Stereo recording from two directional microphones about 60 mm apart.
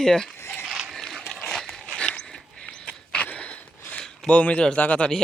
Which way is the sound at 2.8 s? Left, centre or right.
Left.